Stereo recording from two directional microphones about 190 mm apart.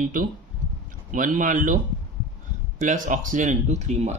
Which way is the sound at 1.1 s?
45° right (ahead or behind).